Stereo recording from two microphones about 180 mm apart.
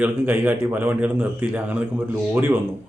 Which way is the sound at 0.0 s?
10° right (ahead or behind).